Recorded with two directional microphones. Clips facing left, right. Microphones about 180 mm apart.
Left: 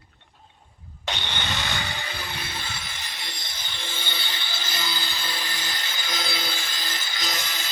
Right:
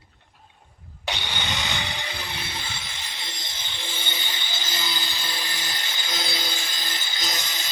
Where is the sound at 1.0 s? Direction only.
10° right (ahead or behind).